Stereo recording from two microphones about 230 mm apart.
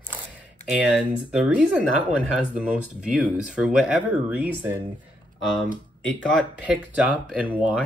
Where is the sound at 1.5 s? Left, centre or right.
Centre.